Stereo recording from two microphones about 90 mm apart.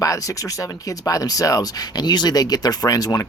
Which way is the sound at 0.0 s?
40° left (ahead or behind).